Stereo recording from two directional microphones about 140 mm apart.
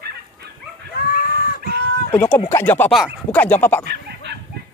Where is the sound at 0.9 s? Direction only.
90° left.